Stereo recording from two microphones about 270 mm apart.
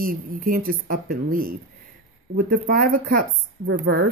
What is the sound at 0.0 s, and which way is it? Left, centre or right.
A woman's voice, right.